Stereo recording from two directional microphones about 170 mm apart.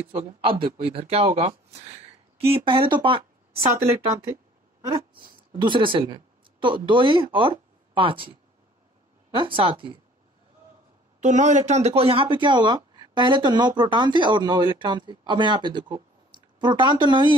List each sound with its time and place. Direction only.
0.1 s speech: 35° right (ahead or behind)
5.2 s speech: 30° right (ahead or behind)
11.1 s speech: 45° right (ahead or behind); by 17.4 s 25° right (ahead or behind)